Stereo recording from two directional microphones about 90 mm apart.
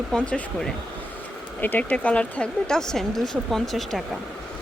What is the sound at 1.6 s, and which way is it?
Speech, 20° left (ahead or behind).